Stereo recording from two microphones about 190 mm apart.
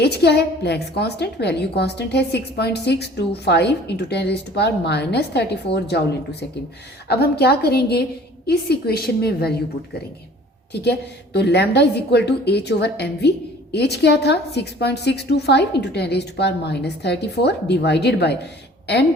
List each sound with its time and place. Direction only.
0.0 s a woman's voice: 60° left (ahead or behind)
7.1 s a woman's voice: 55° left (ahead or behind)
10.7 s a woman's voice: 60° left (ahead or behind)